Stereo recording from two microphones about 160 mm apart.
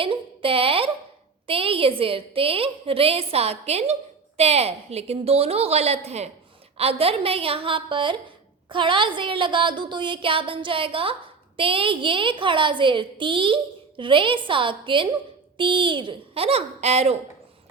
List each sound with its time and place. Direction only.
0.0 s a woman's voice: 35° right (ahead or behind)